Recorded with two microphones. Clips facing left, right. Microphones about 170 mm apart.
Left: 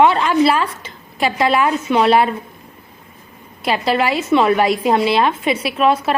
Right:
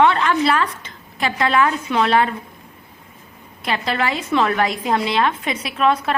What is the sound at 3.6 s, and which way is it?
A woman's voice, 10° left (ahead or behind).